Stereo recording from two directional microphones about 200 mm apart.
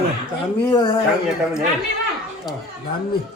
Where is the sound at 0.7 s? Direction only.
25° left (ahead or behind).